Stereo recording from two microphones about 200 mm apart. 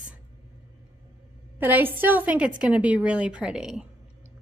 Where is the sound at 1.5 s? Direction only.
10° right (ahead or behind).